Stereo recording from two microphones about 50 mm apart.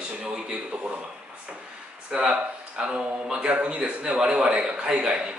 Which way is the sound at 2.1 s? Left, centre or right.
Right.